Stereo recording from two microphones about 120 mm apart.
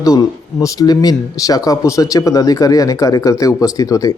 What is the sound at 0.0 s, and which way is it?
Speech, 30° left (ahead or behind).